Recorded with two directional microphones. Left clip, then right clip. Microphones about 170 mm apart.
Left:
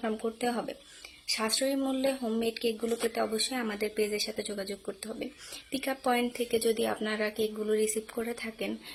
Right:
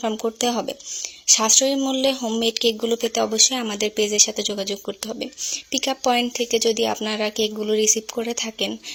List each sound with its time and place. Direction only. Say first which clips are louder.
0.0 s speech: right 9 dB; 35° right (ahead or behind)